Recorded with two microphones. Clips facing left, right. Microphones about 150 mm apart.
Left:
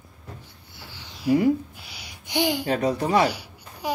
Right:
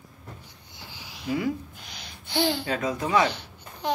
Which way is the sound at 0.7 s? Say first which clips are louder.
Even; 15° right (ahead or behind).